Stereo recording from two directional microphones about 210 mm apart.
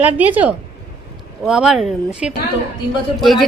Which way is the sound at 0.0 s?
10° right (ahead or behind).